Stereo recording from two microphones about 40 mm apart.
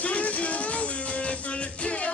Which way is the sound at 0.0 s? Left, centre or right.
Left.